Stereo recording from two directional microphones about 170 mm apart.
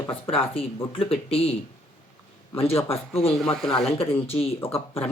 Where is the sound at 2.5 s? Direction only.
35° left (ahead or behind).